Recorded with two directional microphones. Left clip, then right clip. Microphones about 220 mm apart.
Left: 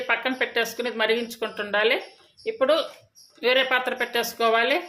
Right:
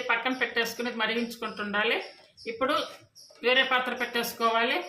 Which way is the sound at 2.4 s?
30° left (ahead or behind).